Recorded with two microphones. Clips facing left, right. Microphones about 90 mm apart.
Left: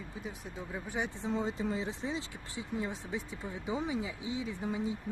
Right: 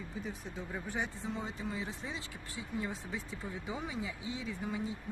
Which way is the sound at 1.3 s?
30° left (ahead or behind).